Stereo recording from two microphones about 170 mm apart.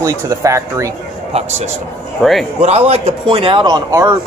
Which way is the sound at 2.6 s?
40° right (ahead or behind).